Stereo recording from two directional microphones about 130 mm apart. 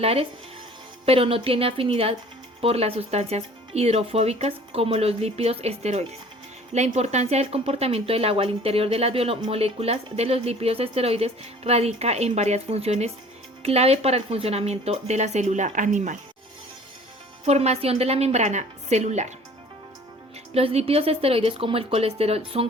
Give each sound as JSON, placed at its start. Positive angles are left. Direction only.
{"t": 0.0, "sound": "speech", "side_deg": -50}
{"t": 17.4, "sound": "speech", "side_deg": -55}
{"t": 20.5, "sound": "speech", "side_deg": -50}